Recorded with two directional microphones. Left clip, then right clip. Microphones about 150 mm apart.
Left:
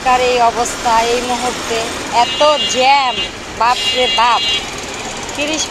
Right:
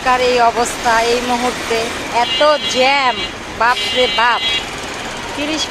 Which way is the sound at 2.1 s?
25° right (ahead or behind).